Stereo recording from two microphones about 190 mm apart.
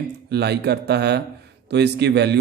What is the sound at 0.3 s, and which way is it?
Speech, 60° right (ahead or behind).